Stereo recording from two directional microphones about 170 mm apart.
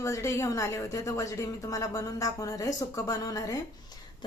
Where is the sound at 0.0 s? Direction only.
20° left (ahead or behind).